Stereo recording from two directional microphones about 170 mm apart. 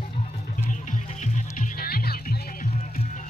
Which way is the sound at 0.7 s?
45° left (ahead or behind).